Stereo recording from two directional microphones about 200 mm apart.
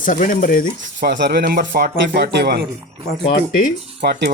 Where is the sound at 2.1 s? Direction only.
60° right (ahead or behind).